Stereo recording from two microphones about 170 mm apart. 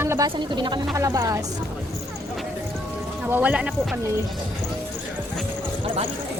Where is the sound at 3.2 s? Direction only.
10° right (ahead or behind).